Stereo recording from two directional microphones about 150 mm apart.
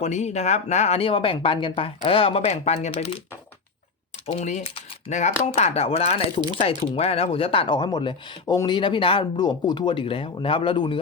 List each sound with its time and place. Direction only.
0.0 s speech: 50° left (ahead or behind)
4.4 s speech: 50° left (ahead or behind); by 11.0 s 35° left (ahead or behind)